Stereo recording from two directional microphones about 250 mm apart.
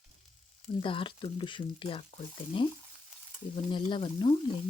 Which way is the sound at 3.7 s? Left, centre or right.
Centre.